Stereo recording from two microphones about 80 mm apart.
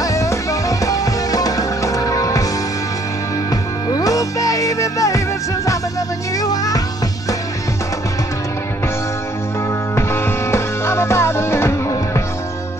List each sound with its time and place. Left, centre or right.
0.0 s music: left
3.9 s music: left
6.4 s music: left
9.9 s music: left